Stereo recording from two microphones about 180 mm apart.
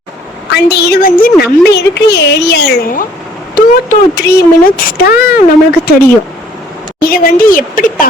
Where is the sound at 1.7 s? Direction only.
70° left (ahead or behind).